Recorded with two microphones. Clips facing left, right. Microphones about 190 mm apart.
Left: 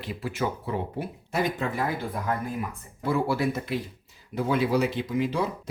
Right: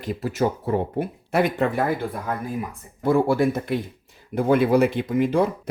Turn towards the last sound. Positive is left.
turn(degrees=-50)  # may be behind; listen again after turning